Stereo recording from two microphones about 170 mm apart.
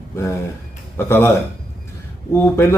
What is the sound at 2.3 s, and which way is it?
Speech, 15° left (ahead or behind).